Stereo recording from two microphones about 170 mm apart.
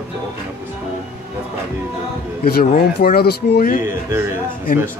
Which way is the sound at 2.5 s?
60° left (ahead or behind).